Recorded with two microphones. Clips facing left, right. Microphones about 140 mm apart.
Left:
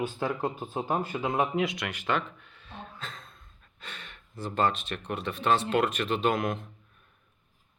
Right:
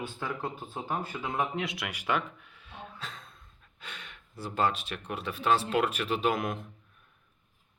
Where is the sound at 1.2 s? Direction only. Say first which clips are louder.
Left 4 dB; 40° left (ahead or behind).